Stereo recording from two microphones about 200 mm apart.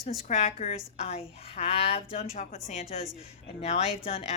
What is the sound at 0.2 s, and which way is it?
A woman's voice, 35° left (ahead or behind).